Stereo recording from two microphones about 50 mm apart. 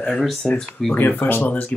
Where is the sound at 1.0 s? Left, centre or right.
Left.